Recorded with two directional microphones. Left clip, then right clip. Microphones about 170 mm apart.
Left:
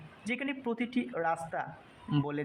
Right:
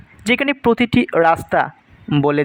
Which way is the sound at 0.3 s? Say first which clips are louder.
Right 19 dB; 50° right (ahead or behind).